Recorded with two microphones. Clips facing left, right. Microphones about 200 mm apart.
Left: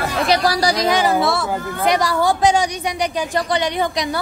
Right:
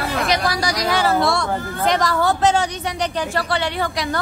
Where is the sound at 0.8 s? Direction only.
15° left (ahead or behind).